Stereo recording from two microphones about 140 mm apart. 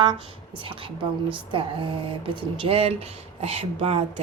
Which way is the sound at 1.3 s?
40° right (ahead or behind).